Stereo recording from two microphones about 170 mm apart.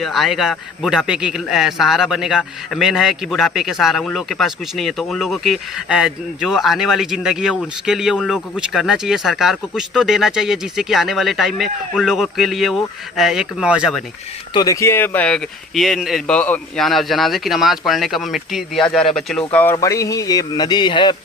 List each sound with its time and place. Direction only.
0.0 s a man's voice: centre (ahead or behind)
14.5 s a man's voice: 20° left (ahead or behind)